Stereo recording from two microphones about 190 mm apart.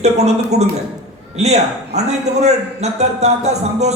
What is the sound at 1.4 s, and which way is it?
A man's voice, 35° right (ahead or behind).